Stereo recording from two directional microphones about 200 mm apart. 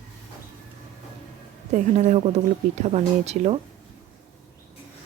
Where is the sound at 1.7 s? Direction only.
35° right (ahead or behind).